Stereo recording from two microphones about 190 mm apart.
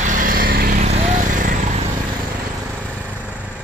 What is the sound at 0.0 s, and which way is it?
Vehicle, 45° right (ahead or behind).